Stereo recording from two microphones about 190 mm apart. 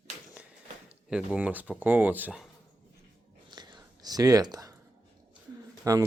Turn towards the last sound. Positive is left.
turn(degrees=-20)  # may be behind; listen again after turning